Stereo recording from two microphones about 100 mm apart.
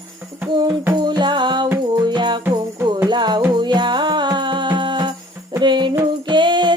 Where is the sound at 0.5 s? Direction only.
45° right (ahead or behind).